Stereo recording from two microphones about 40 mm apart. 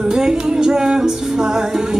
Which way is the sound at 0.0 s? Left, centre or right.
Centre.